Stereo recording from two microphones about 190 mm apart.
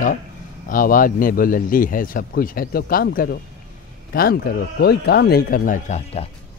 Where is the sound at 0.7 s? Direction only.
45° left (ahead or behind).